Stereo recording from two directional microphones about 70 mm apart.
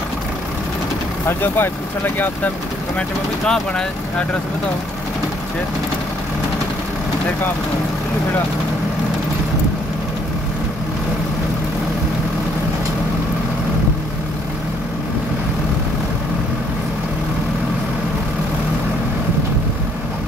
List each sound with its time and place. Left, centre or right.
1.2 s speech: left
3.0 s speech: centre